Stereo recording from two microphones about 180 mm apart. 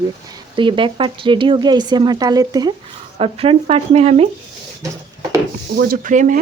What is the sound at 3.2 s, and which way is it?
Speech, 30° right (ahead or behind).